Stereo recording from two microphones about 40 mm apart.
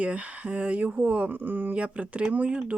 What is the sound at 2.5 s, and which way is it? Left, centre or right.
Speech, right.